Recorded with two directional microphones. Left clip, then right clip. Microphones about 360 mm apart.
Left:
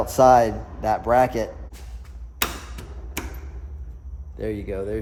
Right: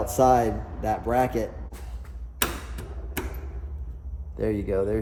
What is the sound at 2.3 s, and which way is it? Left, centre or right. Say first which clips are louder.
Tick-tock: left 2 dB; centre.